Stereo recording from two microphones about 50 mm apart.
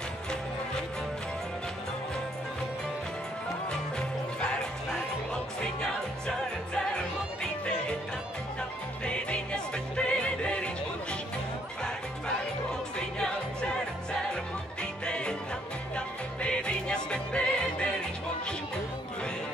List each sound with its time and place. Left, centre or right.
6.2 s music: centre
9.0 s music: centre
14.3 s music: centre
16.3 s music: left